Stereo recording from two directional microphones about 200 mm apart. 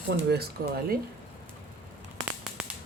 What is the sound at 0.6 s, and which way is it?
Speech, 50° right (ahead or behind).